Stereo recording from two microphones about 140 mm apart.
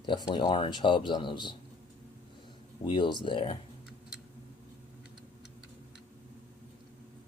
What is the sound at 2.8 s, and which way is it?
Speech, 35° left (ahead or behind).